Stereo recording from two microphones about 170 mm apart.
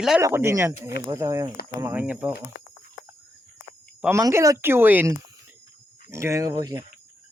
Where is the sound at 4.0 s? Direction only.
15° right (ahead or behind).